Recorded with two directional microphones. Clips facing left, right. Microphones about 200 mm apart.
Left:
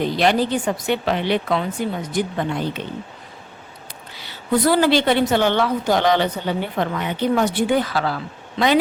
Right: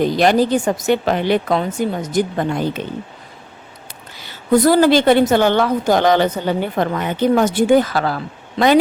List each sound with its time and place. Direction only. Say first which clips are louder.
0.0 s a woman's voice: right 4 dB; 45° right (ahead or behind)
4.2 s a woman's voice: right 5 dB; 45° right (ahead or behind)